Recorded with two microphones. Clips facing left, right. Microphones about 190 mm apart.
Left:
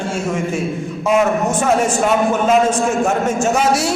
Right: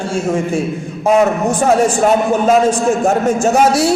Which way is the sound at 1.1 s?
35° right (ahead or behind).